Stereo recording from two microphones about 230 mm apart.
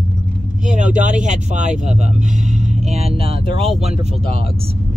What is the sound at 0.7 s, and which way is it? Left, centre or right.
Speech, right.